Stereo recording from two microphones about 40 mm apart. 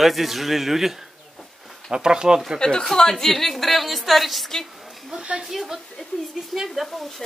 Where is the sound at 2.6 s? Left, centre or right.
Centre.